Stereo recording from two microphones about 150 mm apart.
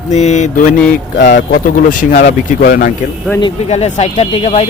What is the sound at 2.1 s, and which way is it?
Speech, 65° left (ahead or behind).